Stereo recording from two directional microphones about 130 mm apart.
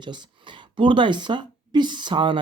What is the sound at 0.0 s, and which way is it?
Speech, 35° right (ahead or behind).